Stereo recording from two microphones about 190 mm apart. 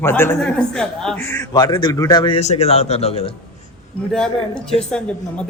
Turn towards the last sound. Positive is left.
turn(degrees=5)  # may be behind; listen again after turning